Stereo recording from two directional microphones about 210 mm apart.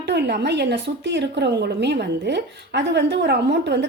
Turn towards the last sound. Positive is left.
turn(degrees=-55)  # may be behind; listen again after turning